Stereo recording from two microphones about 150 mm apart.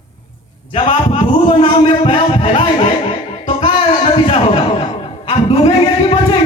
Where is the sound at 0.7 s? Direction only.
35° left (ahead or behind).